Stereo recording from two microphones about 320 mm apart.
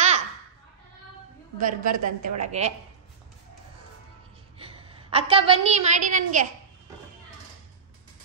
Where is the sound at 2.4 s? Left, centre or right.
Right.